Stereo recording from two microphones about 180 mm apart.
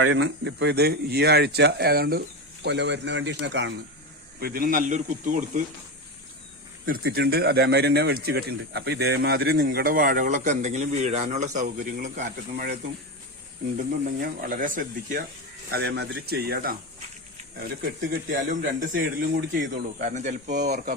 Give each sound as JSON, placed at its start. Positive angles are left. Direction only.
{"t": 0.0, "sound": "speech", "side_deg": -90}
{"t": 4.4, "sound": "speech", "side_deg": -55}
{"t": 6.8, "sound": "speech", "side_deg": -55}
{"t": 14.0, "sound": "speech", "side_deg": -50}
{"t": 15.7, "sound": "speech", "side_deg": -65}